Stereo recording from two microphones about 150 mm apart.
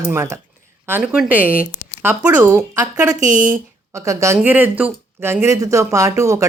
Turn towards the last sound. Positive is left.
turn(degrees=-20)  # may be behind; listen again after turning